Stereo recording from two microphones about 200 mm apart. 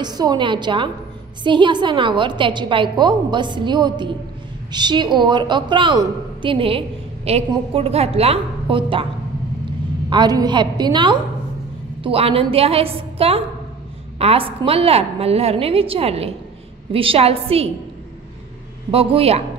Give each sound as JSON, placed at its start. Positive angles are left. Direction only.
{"t": 0.0, "sound": "a woman's voice", "side_deg": -20}
{"t": 10.0, "sound": "a woman's voice", "side_deg": -20}
{"t": 18.9, "sound": "a woman's voice", "side_deg": -30}